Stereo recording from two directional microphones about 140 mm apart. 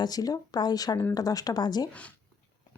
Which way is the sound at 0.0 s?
25° left (ahead or behind).